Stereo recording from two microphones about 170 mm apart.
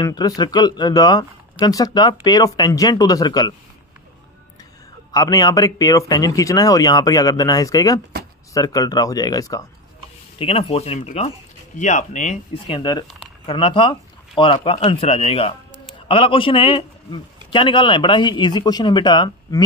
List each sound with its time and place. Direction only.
0.0 s a man's voice: 20° left (ahead or behind)
5.1 s a man's voice: 20° left (ahead or behind)
10.4 s speech: 35° left (ahead or behind)
12.6 s a man's voice: 25° left (ahead or behind)